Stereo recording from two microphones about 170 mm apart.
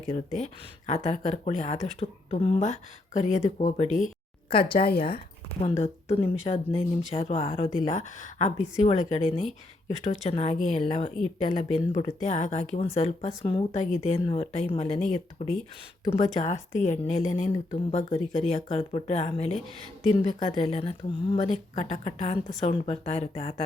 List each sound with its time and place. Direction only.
0.3 s speech: 40° left (ahead or behind)
4.4 s speech: 30° left (ahead or behind)
4.8 s speech: 60° left (ahead or behind)
5.5 s speech: 40° left (ahead or behind)
7.8 s speech: 45° left (ahead or behind); by 13.7 s 30° left (ahead or behind)
13.7 s speech: 45° left (ahead or behind)
16.0 s speech: 40° left (ahead or behind)